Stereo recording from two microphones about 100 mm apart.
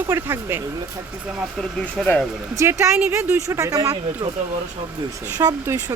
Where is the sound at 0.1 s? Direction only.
25° right (ahead or behind).